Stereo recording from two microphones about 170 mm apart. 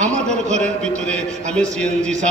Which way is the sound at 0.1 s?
45° right (ahead or behind).